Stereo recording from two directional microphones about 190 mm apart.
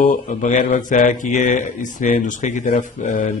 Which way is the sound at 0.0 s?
40° left (ahead or behind).